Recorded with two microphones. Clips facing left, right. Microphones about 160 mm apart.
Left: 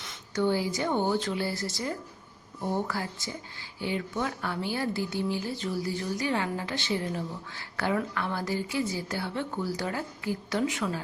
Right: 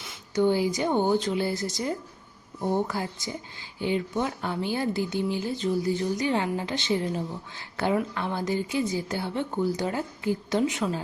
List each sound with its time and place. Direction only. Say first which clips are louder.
0.3 s a woman's voice: right 4 dB; 15° right (ahead or behind)